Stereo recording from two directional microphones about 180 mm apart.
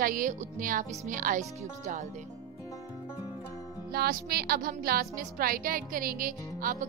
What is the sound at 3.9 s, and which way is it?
Speech, 60° right (ahead or behind).